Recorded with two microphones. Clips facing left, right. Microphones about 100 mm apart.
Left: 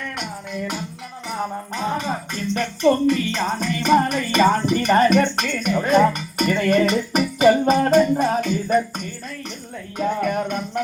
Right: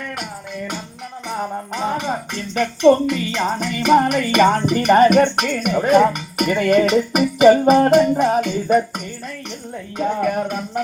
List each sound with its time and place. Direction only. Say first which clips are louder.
1.7 s a woman's voice: right 3 dB; 15° right (ahead or behind)
10.2 s music: right 2 dB; centre (ahead or behind)